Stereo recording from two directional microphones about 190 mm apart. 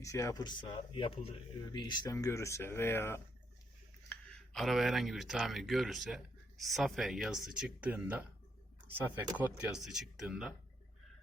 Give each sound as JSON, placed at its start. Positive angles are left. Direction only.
{"t": 0.0, "sound": "speech", "side_deg": 15}